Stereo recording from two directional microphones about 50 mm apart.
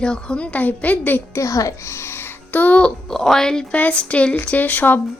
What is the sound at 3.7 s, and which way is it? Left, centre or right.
Speech, left.